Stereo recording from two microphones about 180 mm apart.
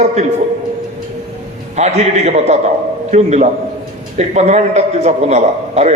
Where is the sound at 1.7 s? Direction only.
40° right (ahead or behind).